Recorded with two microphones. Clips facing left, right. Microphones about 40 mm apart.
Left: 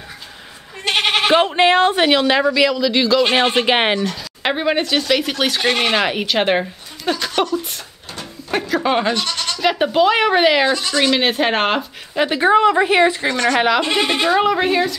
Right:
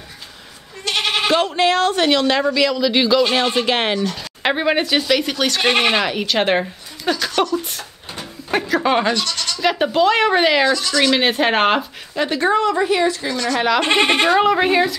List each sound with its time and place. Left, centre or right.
0.8 s speech: left; by 2.8 s centre
2.8 s a man's voice: centre
3.3 s a woman's voice: left
4.4 s a woman's voice: centre
5.1 s speech: centre
5.6 s a man's voice: centre
5.9 s a woman's voice: centre
9.1 s speech: centre
9.6 s speech: centre
10.7 s a woman's voice: left
11.0 s a woman's voice: centre
12.2 s a woman's voice: centre; by 13.6 s left
13.8 s speech: right
14.3 s a woman's voice: centre